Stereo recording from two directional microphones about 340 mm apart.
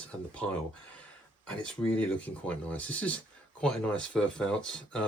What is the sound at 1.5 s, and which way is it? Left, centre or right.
Speech, centre.